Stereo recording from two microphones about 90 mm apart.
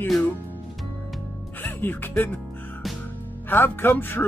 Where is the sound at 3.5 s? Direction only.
25° left (ahead or behind).